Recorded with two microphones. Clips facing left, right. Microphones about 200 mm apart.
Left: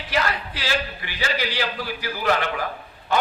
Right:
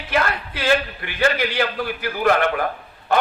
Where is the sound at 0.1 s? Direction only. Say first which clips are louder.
Right 3 dB; 55° right (ahead or behind).